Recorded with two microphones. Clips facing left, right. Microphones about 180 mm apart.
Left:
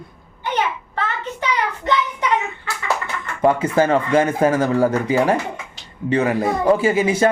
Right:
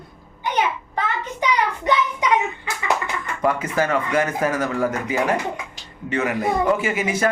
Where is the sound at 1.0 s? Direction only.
15° right (ahead or behind).